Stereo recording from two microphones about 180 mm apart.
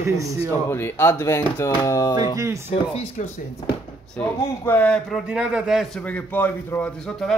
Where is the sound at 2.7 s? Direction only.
40° left (ahead or behind).